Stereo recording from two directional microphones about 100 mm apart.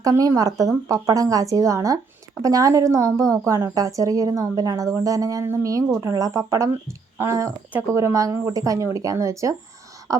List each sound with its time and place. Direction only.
0.0 s a woman's voice: 35° right (ahead or behind)